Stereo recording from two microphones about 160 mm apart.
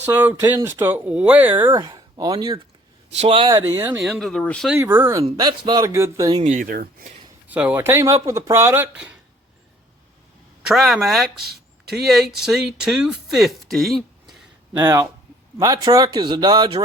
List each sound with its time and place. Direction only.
0.0 s speech: 10° right (ahead or behind)
1.7 s speech: 25° right (ahead or behind)
3.1 s a man's voice: 40° right (ahead or behind)
3.8 s speech: 15° right (ahead or behind)
4.0 s speech: centre (ahead or behind)
4.7 s speech: 15° right (ahead or behind)
5.2 s a man's voice: 30° right (ahead or behind)
6.5 s speech: 60° right (ahead or behind)
7.4 s speech: 10° right (ahead or behind)
10.7 s speech: centre (ahead or behind)
14.8 s a man's voice: 15° right (ahead or behind); by 16.8 s 30° right (ahead or behind)